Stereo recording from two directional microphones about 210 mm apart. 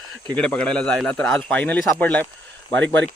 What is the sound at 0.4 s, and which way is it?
Speech, 5° left (ahead or behind).